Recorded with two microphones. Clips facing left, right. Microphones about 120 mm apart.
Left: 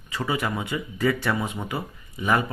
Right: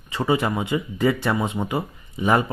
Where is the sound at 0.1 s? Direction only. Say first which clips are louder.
Right 5 dB; 25° right (ahead or behind).